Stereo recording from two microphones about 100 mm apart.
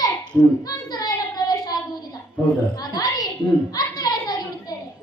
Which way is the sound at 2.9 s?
40° left (ahead or behind).